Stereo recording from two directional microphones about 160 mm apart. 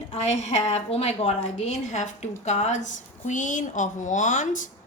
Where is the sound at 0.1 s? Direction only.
45° left (ahead or behind).